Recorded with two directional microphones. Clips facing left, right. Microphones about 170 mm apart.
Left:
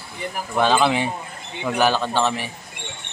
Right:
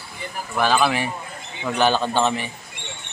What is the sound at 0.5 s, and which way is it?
Speech, 20° left (ahead or behind).